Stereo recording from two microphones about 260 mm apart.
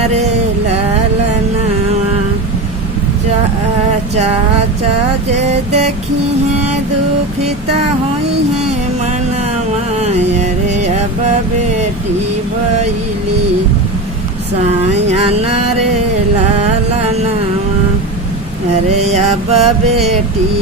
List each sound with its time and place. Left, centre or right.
5.3 s music: right
9.9 s music: right
14.7 s a sound: right
18.9 s mantra: right